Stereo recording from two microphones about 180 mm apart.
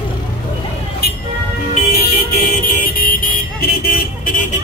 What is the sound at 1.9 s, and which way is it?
Vehicle, 60° left (ahead or behind).